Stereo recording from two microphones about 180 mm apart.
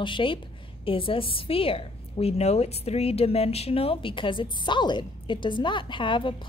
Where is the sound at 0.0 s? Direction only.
30° left (ahead or behind).